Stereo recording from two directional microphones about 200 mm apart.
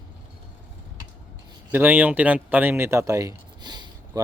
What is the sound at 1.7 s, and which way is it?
Speech, 10° right (ahead or behind).